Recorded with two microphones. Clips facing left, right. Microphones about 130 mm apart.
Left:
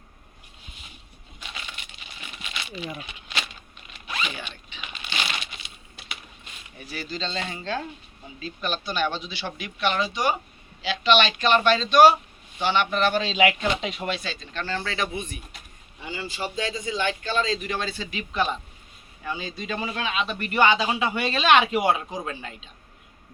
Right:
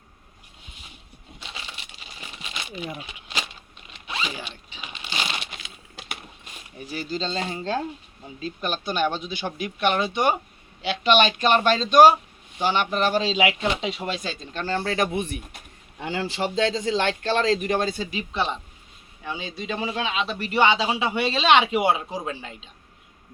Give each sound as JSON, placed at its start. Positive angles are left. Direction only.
{"t": 1.4, "sound": "a sound", "side_deg": -30}
{"t": 2.2, "sound": "crumpling", "side_deg": -35}
{"t": 3.9, "sound": "zipper", "side_deg": -20}
{"t": 4.4, "sound": "a sound", "side_deg": -35}
{"t": 5.1, "sound": "crumpling", "side_deg": -20}
{"t": 6.7, "sound": "speech", "side_deg": -35}
{"t": 14.1, "sound": "speech", "side_deg": -40}
{"t": 16.0, "sound": "a man's voice", "side_deg": -70}
{"t": 19.2, "sound": "speech", "side_deg": -15}